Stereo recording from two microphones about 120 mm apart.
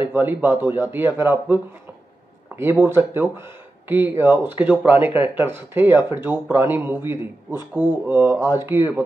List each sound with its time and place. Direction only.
0.0 s speech: 20° right (ahead or behind)